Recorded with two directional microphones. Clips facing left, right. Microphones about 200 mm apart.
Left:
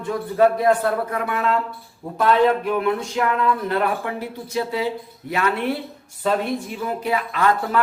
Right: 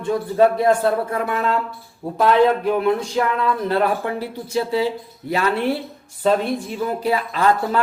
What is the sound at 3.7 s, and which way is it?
Speech, 30° right (ahead or behind).